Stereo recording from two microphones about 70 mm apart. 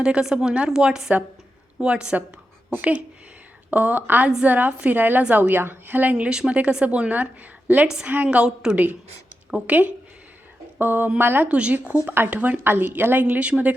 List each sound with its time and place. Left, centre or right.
0.0 s a woman's voice: centre
6.2 s a woman's voice: centre
10.8 s speech: right
11.4 s a woman's voice: centre
12.0 s a woman's voice: right